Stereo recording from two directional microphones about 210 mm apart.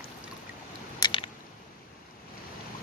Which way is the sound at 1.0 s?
25° left (ahead or behind).